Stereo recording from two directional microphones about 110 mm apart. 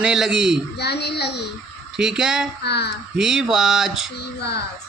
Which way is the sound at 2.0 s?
5° right (ahead or behind).